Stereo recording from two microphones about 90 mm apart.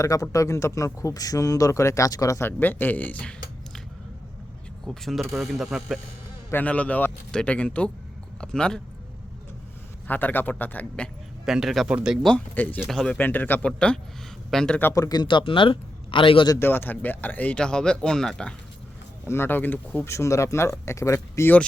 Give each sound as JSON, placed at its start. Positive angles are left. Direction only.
{"t": 0.0, "sound": "speech", "side_deg": 35}
{"t": 2.5, "sound": "a man's voice", "side_deg": 20}
{"t": 4.9, "sound": "speech", "side_deg": 0}
{"t": 6.5, "sound": "speech", "side_deg": 15}
{"t": 10.1, "sound": "a man's voice", "side_deg": 20}
{"t": 11.4, "sound": "speech", "side_deg": -5}
{"t": 12.5, "sound": "a man's voice", "side_deg": 20}
{"t": 14.9, "sound": "a man's voice", "side_deg": 45}
{"t": 16.6, "sound": "speech", "side_deg": 25}
{"t": 19.2, "sound": "a man's voice", "side_deg": 25}
{"t": 20.1, "sound": "speech", "side_deg": 30}